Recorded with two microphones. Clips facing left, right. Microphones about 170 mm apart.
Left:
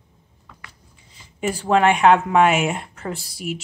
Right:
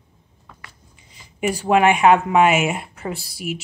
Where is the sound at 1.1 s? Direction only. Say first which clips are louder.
Right 2 dB; 15° right (ahead or behind).